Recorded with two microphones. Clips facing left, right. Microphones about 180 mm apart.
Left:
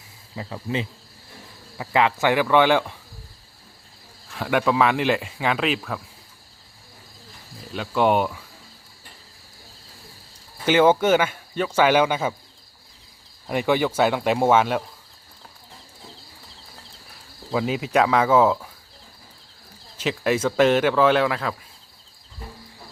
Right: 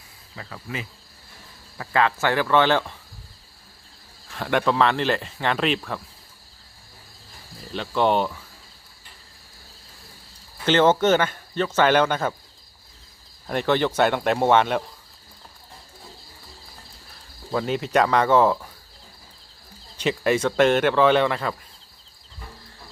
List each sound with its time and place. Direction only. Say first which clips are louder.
0.3 s speech: left 6 dB; 25° left (ahead or behind)
4.4 s speech: left 1 dB; 5° left (ahead or behind)
7.7 s speech: left 1 dB; 5° left (ahead or behind)
10.7 s speech: left 1 dB; 10° left (ahead or behind)
13.5 s speech: even; 10° left (ahead or behind)
17.5 s speech: even; 5° left (ahead or behind)
20.0 s speech: right 1 dB; centre (ahead or behind)